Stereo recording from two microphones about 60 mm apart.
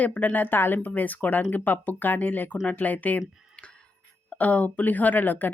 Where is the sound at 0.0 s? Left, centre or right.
Left.